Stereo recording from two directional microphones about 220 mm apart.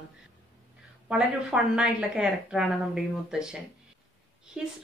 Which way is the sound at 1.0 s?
5° right (ahead or behind).